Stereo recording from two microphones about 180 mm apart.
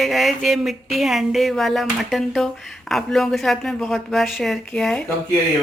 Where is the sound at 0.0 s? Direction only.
Centre (ahead or behind).